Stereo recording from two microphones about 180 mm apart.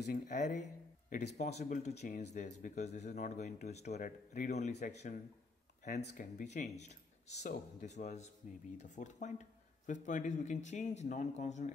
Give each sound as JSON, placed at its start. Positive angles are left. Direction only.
{"t": 0.0, "sound": "speech", "side_deg": 45}